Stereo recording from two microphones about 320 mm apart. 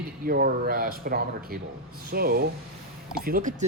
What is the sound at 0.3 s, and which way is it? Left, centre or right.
Speech, right.